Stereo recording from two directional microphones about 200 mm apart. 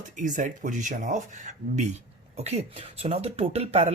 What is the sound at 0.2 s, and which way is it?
Speech, 40° right (ahead or behind).